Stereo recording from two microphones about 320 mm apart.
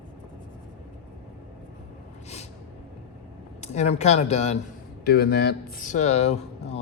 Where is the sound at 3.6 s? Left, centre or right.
Left.